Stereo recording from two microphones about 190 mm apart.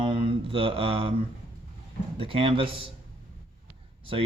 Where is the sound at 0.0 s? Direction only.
25° right (ahead or behind).